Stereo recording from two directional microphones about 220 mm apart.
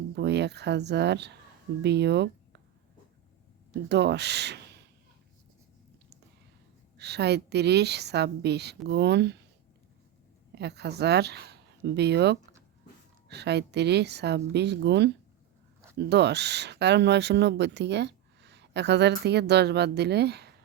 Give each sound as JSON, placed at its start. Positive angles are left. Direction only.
{"t": 0.1, "sound": "speech", "side_deg": -50}
{"t": 3.8, "sound": "speech", "side_deg": -50}
{"t": 6.9, "sound": "speech", "side_deg": -50}
{"t": 10.5, "sound": "speech", "side_deg": -50}